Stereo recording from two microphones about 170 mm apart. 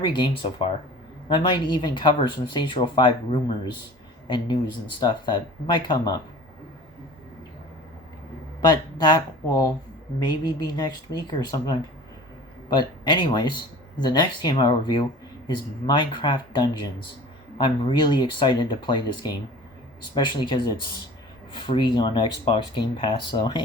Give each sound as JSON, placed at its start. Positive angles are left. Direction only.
{"t": 0.0, "sound": "speech", "side_deg": 25}
{"t": 4.9, "sound": "speech", "side_deg": 25}
{"t": 8.6, "sound": "speech", "side_deg": 25}